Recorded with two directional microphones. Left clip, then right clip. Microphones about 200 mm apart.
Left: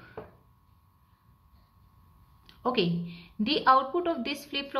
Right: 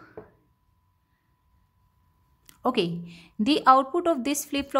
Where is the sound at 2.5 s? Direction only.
55° right (ahead or behind).